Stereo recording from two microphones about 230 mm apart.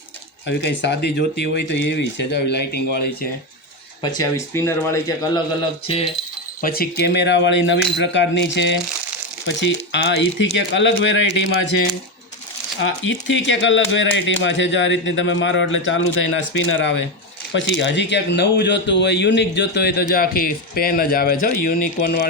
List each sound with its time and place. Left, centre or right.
0.4 s speech: left
4.0 s speech: centre
6.6 s speech: left
12.8 s speech: left